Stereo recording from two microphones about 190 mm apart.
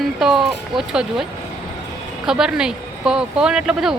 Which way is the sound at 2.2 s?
5° right (ahead or behind).